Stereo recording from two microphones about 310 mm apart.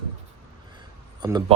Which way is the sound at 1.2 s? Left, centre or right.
Centre.